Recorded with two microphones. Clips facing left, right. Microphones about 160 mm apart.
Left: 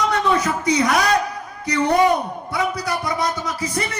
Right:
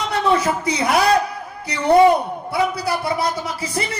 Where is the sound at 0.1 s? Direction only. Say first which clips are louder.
Right 1 dB; 30° right (ahead or behind).